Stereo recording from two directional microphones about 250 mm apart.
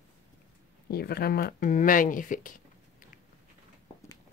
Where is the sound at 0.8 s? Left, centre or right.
Left.